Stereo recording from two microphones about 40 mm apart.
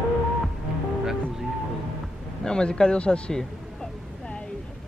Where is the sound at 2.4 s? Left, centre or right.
Left.